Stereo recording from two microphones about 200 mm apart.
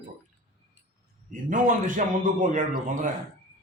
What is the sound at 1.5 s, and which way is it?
A man's voice, 40° right (ahead or behind).